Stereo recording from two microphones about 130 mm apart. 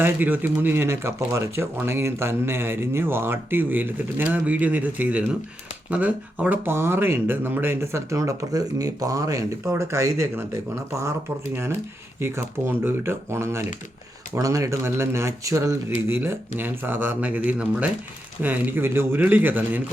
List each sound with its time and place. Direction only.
0.0 s speech: 15° right (ahead or behind)